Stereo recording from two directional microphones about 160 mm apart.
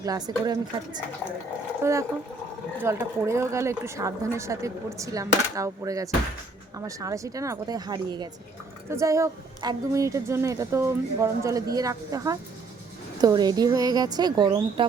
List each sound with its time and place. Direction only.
0.0 s a woman's voice: 20° right (ahead or behind)